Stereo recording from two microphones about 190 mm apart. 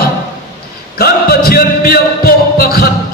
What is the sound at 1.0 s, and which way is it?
Speech, 55° left (ahead or behind).